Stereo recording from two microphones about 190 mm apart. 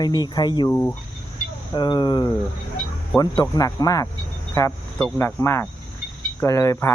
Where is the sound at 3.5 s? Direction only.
20° left (ahead or behind).